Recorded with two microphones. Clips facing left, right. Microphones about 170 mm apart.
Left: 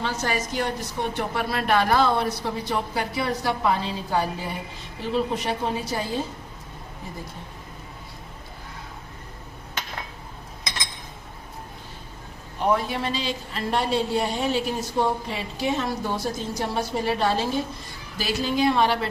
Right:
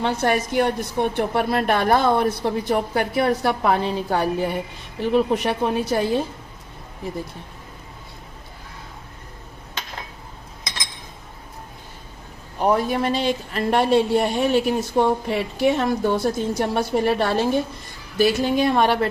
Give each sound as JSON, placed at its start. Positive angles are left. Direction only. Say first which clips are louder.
{"t": 0.0, "sound": "speech", "louder": "right 6 dB", "side_deg": -60}
{"t": 12.7, "sound": "speech", "louder": "right 6 dB", "side_deg": -50}